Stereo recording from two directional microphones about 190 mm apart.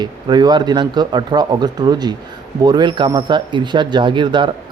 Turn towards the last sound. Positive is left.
turn(degrees=-25)  # may be behind; listen again after turning